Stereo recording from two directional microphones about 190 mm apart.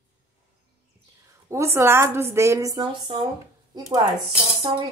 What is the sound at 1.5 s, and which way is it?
A woman's voice, 15° right (ahead or behind).